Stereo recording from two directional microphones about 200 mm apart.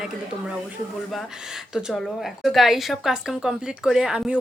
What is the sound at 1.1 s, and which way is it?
Speech, centre (ahead or behind).